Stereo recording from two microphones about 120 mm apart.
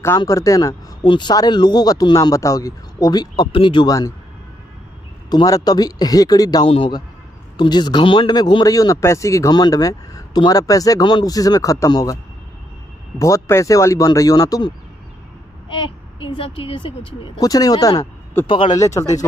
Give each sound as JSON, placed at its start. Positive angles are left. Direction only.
{"t": 0.2, "sound": "a man's voice", "side_deg": 30}
{"t": 5.3, "sound": "a man's voice", "side_deg": 30}
{"t": 6.6, "sound": "speech", "side_deg": 50}
{"t": 7.5, "sound": "a man's voice", "side_deg": 35}
{"t": 13.2, "sound": "speech", "side_deg": 25}
{"t": 15.7, "sound": "speech", "side_deg": 45}
{"t": 17.4, "sound": "a man's voice", "side_deg": 30}
{"t": 18.4, "sound": "speech", "side_deg": 15}
{"t": 19.0, "sound": "a man's voice", "side_deg": 35}